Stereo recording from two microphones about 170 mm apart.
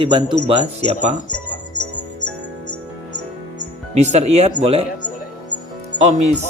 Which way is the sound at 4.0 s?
40° right (ahead or behind).